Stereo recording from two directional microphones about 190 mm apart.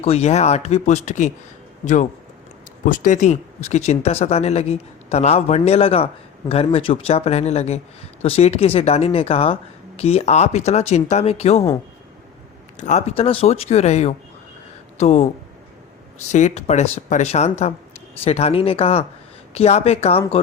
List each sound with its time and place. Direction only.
0.0 s speech: 35° left (ahead or behind)
12.8 s speech: 35° left (ahead or behind)
16.3 s speech: 35° left (ahead or behind)